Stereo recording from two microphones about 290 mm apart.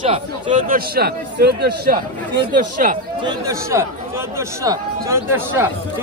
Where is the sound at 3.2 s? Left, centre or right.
Centre.